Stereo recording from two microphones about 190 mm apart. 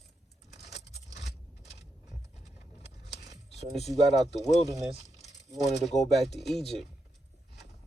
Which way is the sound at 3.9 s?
20° right (ahead or behind).